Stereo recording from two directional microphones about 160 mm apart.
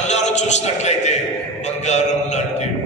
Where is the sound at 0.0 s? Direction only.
45° left (ahead or behind).